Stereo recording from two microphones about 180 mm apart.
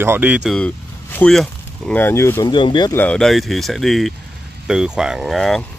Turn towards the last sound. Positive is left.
turn(degrees=0)  # may be behind; listen again after turning